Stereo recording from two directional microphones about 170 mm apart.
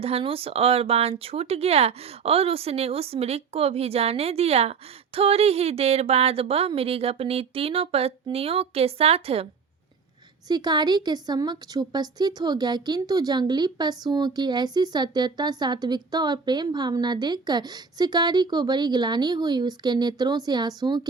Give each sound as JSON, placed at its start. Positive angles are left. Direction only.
{"t": 0.0, "sound": "speech", "side_deg": -35}
{"t": 10.5, "sound": "a woman's voice", "side_deg": -25}